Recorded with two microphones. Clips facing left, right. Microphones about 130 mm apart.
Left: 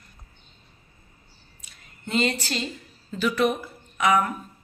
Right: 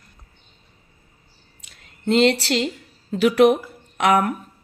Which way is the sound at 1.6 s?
75° right (ahead or behind).